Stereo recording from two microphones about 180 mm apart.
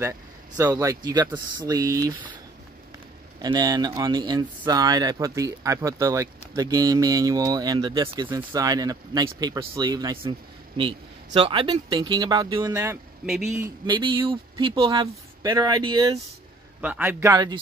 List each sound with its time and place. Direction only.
0.6 s a man's voice: 20° right (ahead or behind)
3.3 s speech: 20° right (ahead or behind)
13.8 s speech: 25° right (ahead or behind)
16.8 s a man's voice: 10° right (ahead or behind)